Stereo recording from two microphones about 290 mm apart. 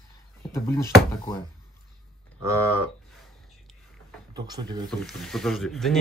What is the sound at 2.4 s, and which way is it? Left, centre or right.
Speech, centre.